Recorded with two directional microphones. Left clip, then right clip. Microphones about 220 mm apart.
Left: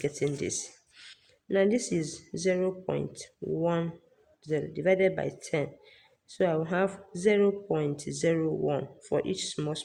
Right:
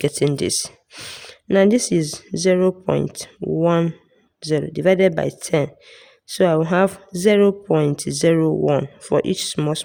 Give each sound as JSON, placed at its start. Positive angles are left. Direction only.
{"t": 0.0, "sound": "speech", "side_deg": -55}